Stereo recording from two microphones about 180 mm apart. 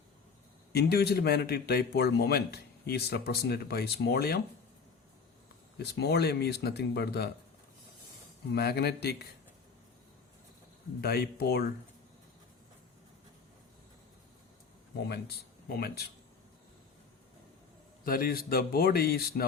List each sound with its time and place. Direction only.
0.7 s a man's voice: 60° left (ahead or behind)
5.8 s a man's voice: 65° left (ahead or behind)
8.5 s a man's voice: 60° left (ahead or behind)
11.0 s a man's voice: 60° left (ahead or behind)
14.9 s speech: 65° left (ahead or behind)
18.0 s a man's voice: 55° left (ahead or behind)